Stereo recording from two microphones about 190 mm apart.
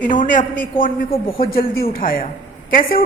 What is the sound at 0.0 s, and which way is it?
A woman's voice, 45° left (ahead or behind).